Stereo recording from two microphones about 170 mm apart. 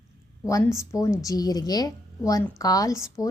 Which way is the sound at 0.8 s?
20° left (ahead or behind).